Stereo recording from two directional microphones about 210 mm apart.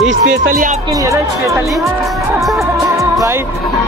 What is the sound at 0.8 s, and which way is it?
Speech, 15° right (ahead or behind).